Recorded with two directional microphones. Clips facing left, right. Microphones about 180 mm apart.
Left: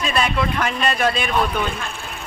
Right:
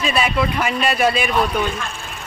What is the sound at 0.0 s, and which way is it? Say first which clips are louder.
Speech: right 2 dB; 5° right (ahead or behind).